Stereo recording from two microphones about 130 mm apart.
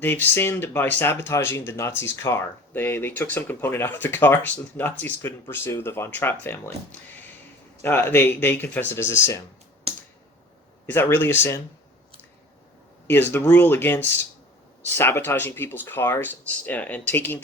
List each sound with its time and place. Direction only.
0.0 s speech: 15° left (ahead or behind)
7.8 s speech: 15° left (ahead or behind)
10.8 s speech: 15° left (ahead or behind)
13.1 s speech: 15° left (ahead or behind)